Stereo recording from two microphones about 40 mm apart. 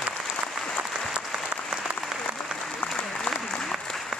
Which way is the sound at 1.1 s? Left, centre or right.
Right.